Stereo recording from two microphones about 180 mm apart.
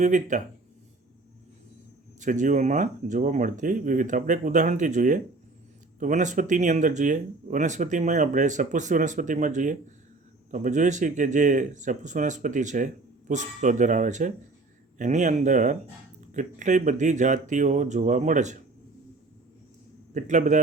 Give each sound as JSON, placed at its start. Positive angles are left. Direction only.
{"t": 0.0, "sound": "speech", "side_deg": -45}
{"t": 2.2, "sound": "speech", "side_deg": -45}
{"t": 20.1, "sound": "speech", "side_deg": -45}